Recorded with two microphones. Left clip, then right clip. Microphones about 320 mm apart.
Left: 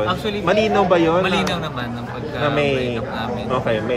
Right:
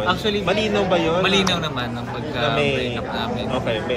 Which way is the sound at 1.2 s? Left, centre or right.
Centre.